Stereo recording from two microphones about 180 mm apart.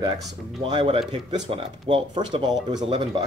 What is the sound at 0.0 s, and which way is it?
Speech, 25° right (ahead or behind).